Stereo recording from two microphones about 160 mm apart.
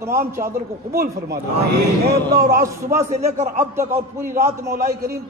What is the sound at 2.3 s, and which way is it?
Speech, 70° right (ahead or behind).